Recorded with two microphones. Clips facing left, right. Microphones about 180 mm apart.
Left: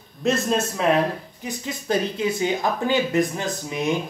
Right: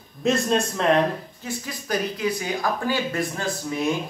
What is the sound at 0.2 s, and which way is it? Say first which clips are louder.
Speech: even; centre (ahead or behind).